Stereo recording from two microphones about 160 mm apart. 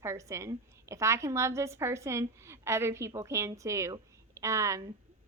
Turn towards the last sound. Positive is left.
turn(degrees=-20)  # may be behind; listen again after turning